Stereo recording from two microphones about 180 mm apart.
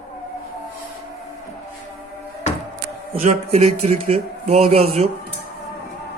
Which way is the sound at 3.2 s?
35° right (ahead or behind).